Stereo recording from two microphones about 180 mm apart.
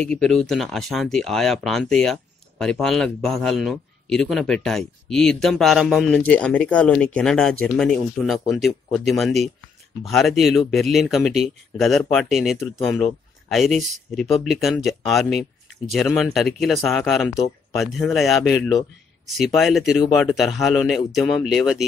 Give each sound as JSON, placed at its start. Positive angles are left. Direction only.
{"t": 0.0, "sound": "a man's voice", "side_deg": 5}